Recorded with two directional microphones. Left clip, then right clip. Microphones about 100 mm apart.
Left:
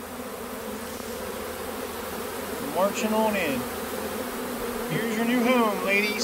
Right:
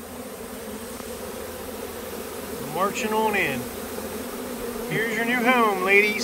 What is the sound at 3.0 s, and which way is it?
Speech, 55° left (ahead or behind).